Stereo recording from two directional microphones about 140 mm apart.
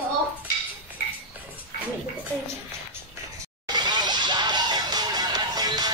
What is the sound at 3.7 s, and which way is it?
Music, 30° right (ahead or behind).